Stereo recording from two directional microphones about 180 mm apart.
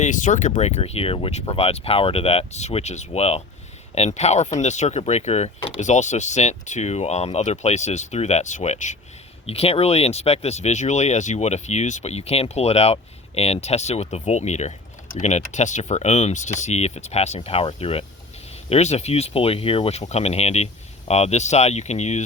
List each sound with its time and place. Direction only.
0.0 s speech: 45° left (ahead or behind)